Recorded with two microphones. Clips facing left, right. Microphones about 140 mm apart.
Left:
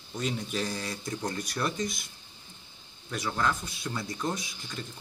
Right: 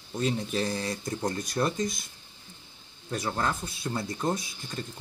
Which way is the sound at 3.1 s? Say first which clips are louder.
Even; 30° right (ahead or behind).